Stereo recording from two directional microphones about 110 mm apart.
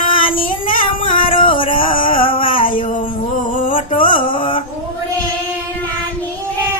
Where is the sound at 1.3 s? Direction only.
50° left (ahead or behind).